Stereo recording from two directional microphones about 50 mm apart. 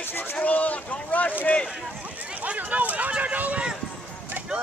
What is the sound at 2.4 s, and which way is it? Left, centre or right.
Speech, right.